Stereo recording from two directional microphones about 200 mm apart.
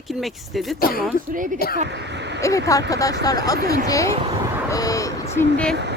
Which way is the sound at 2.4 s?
15° left (ahead or behind).